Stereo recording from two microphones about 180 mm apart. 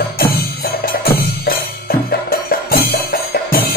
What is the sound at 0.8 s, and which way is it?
Music, 60° left (ahead or behind).